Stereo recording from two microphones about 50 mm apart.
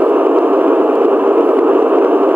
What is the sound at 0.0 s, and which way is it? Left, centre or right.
Radio, right.